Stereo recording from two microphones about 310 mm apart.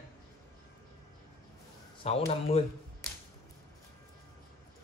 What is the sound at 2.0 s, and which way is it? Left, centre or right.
Speech, centre.